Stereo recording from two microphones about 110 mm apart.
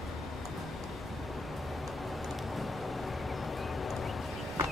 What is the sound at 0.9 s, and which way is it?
Vehicle, centre (ahead or behind).